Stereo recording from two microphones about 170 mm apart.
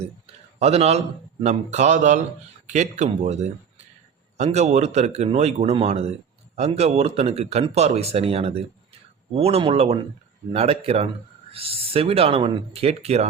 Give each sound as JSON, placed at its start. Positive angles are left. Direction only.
{"t": 0.6, "sound": "a man's voice", "side_deg": -40}